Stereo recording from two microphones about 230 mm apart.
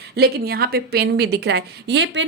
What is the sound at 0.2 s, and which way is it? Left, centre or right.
A woman's voice, right.